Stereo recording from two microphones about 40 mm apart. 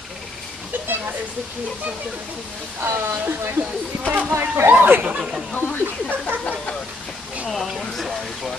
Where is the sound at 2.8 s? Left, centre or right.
Right.